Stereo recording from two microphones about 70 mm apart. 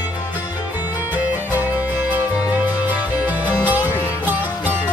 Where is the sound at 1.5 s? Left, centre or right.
Right.